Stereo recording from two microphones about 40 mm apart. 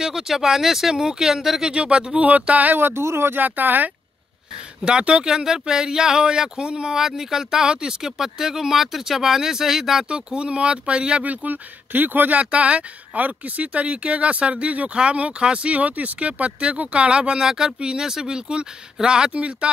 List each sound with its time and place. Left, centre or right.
0.0 s speech: centre
1.7 s speech: right
2.1 s speech: right
2.8 s speech: right
3.3 s speech: right
4.8 s speech: right
10.0 s speech: right
11.2 s speech: right
12.4 s speech: right
17.4 s speech: centre; by 19.7 s right